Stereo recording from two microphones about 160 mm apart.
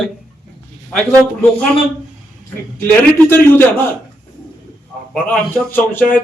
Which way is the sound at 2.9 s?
15° left (ahead or behind).